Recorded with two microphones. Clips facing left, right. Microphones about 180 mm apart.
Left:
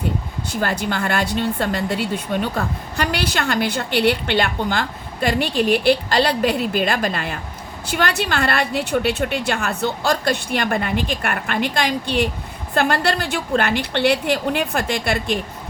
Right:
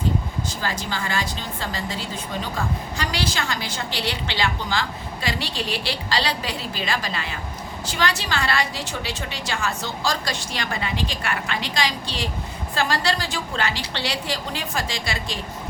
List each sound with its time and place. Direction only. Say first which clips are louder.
0.4 s a woman's voice: left 6 dB; 60° left (ahead or behind)